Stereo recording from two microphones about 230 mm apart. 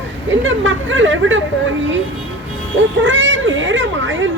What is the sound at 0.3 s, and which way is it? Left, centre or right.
Speech, right.